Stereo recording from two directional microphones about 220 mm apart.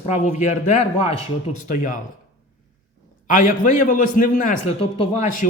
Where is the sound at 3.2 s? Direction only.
35° left (ahead or behind).